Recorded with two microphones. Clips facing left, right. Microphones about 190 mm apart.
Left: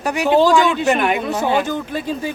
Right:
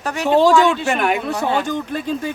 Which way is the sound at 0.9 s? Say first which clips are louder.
Left 2 dB; centre (ahead or behind).